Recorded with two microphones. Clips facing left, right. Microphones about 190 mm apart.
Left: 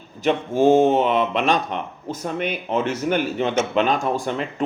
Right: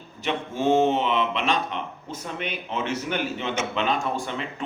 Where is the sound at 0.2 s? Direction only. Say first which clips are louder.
Left 8 dB; 45° left (ahead or behind).